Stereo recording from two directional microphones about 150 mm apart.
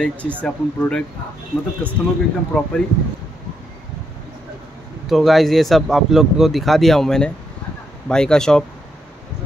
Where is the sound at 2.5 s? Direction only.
5° left (ahead or behind).